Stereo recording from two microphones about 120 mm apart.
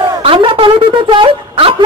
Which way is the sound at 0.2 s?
45° right (ahead or behind).